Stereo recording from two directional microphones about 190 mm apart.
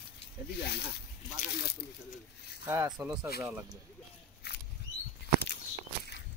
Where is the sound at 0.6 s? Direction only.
60° left (ahead or behind).